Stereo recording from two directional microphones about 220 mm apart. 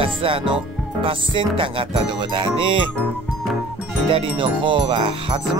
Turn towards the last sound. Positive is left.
turn(degrees=-25)  # may be behind; listen again after turning